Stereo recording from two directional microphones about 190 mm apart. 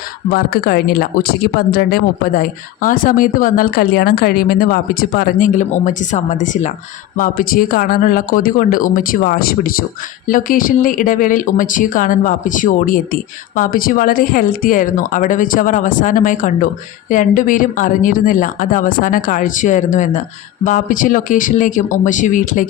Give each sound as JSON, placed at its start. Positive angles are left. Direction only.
{"t": 0.3, "sound": "speech", "side_deg": 55}